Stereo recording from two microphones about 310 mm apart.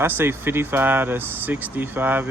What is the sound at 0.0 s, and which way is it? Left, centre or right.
Speech, centre.